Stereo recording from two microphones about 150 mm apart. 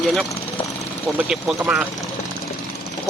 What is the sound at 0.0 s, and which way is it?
Speech, centre (ahead or behind).